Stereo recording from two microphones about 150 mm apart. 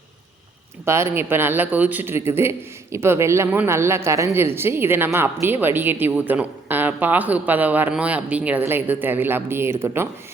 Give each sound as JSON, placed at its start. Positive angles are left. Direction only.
{"t": 0.9, "sound": "a man's voice", "side_deg": -15}